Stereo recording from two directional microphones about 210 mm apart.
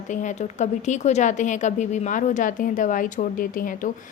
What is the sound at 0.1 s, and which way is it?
A woman's voice, 35° left (ahead or behind).